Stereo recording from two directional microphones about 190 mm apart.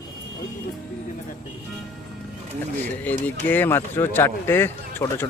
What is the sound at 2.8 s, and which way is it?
Speech, 10° left (ahead or behind).